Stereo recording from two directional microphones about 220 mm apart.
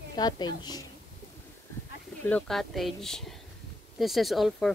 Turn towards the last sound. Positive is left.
turn(degrees=0)  # may be behind; listen again after turning